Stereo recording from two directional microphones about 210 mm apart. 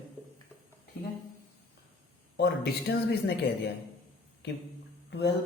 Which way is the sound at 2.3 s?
50° left (ahead or behind).